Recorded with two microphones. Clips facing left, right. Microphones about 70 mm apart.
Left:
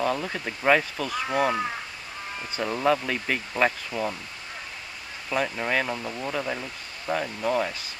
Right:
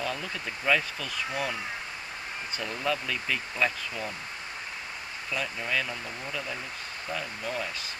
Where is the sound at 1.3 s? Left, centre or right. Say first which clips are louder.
Left 10 dB; left.